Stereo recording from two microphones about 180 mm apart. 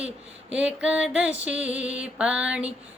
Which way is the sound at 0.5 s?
5° right (ahead or behind).